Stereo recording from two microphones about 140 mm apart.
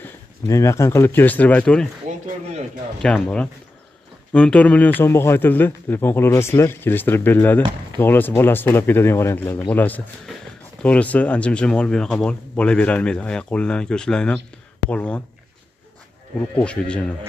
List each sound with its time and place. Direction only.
0.0 s speech: 20° left (ahead or behind)
3.0 s speech: 5° left (ahead or behind)
16.6 s speech: 10° left (ahead or behind)